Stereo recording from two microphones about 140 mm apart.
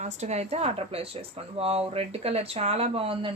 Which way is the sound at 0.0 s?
50° right (ahead or behind).